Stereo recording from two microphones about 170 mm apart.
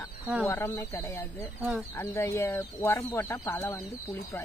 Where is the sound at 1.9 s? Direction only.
15° left (ahead or behind).